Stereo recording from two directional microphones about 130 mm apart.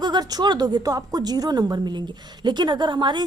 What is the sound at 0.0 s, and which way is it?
A woman's voice, 30° right (ahead or behind).